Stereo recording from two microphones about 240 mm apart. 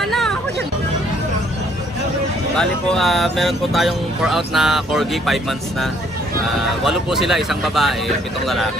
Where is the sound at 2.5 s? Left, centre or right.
Centre.